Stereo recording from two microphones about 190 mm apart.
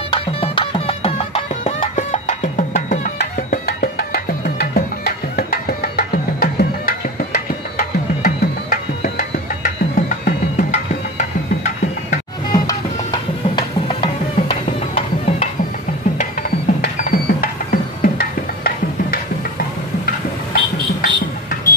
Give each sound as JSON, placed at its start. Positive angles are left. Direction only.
{"t": 0.1, "sound": "music", "side_deg": 25}
{"t": 13.6, "sound": "music", "side_deg": 30}
{"t": 16.2, "sound": "music", "side_deg": 45}
{"t": 20.5, "sound": "music", "side_deg": 50}